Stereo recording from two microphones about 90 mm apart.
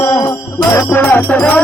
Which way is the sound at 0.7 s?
25° left (ahead or behind).